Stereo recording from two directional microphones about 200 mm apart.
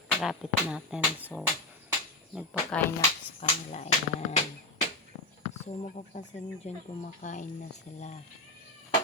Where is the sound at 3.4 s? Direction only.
30° left (ahead or behind).